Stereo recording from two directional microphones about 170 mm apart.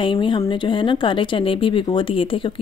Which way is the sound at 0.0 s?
30° left (ahead or behind).